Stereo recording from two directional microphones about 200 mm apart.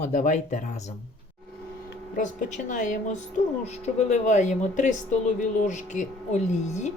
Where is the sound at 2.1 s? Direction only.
40° left (ahead or behind).